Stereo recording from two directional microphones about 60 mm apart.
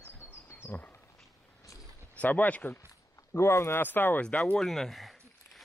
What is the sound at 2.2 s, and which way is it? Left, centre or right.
Speech, left.